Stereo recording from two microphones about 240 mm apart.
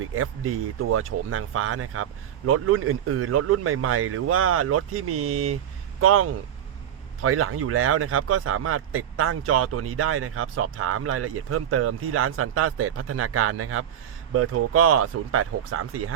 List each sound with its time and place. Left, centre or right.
0.2 s speech: right